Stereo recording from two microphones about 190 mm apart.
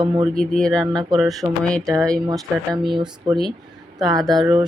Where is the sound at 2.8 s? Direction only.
Centre (ahead or behind).